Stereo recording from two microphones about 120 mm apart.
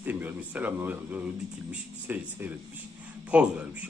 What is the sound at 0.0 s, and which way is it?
Speech, 15° right (ahead or behind).